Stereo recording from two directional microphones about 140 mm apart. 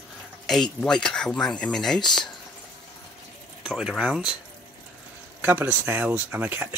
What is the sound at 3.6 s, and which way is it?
Speech, 5° right (ahead or behind).